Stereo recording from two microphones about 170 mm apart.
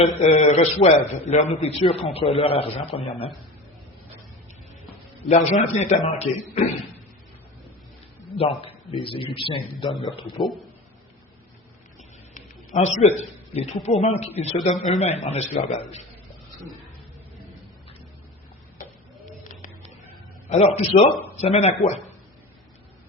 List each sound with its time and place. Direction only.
0.0 s a man's voice: 40° left (ahead or behind)
5.3 s a man's voice: 40° left (ahead or behind)
8.4 s a man's voice: 35° left (ahead or behind)
12.3 s a sound: 45° left (ahead or behind)
13.8 s a man's voice: 40° left (ahead or behind)
20.5 s a man's voice: 40° left (ahead or behind)